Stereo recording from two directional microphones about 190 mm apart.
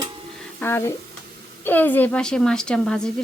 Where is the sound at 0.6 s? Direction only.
10° left (ahead or behind).